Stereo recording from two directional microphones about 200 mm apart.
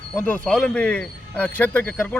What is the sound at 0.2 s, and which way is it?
Speech, 5° left (ahead or behind).